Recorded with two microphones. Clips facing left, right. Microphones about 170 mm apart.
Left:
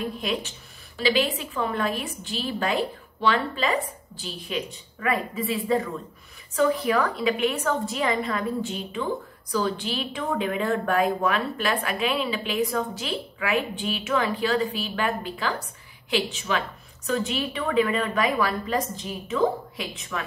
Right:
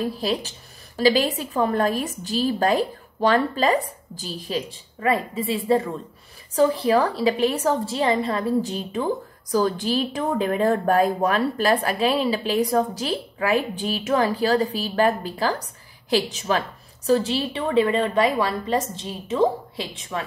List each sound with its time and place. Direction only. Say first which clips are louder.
0.0 s a woman's voice: right 4 dB; 35° right (ahead or behind)